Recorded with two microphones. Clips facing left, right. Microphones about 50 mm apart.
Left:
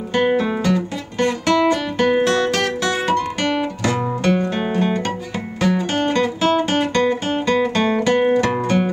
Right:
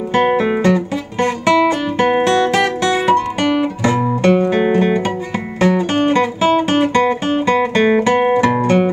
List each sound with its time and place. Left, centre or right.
0.2 s guitar: right
2.5 s music: right
3.4 s guitar: centre
5.6 s music: centre